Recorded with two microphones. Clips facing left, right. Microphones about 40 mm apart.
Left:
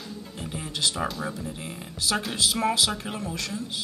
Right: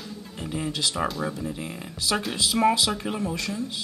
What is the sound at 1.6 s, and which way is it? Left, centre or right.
Speech, centre.